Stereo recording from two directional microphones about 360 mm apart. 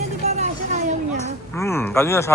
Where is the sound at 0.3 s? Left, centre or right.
Centre.